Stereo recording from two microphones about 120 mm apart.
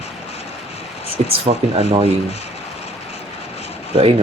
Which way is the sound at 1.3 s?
50° right (ahead or behind).